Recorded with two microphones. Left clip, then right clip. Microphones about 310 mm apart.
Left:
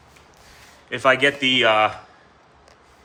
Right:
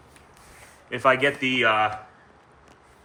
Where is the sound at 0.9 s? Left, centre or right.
Centre.